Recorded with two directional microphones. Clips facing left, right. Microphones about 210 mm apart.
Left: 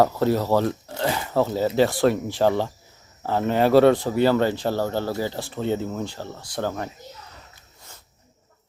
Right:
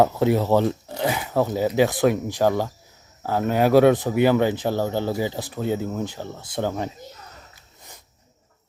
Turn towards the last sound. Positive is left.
turn(degrees=-20)  # may be behind; listen again after turning